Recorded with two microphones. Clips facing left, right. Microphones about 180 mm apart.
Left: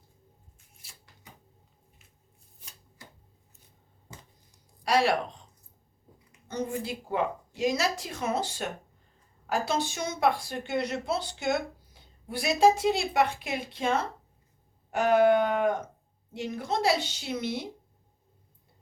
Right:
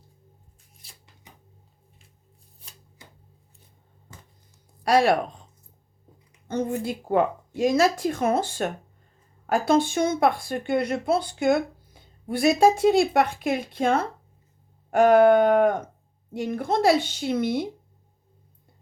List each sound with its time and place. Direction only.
4.8 s speech: 50° right (ahead or behind)
6.5 s a woman's voice: 50° right (ahead or behind)